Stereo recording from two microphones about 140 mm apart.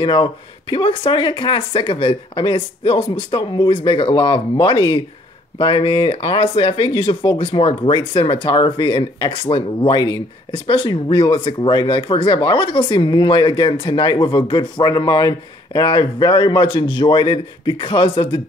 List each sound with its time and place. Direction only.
0.0 s speech: 35° left (ahead or behind)